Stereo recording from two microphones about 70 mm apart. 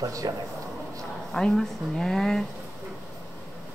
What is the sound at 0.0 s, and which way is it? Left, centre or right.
Speech, right.